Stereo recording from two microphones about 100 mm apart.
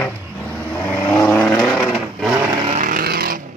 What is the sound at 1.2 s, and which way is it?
Vehicle, 10° left (ahead or behind).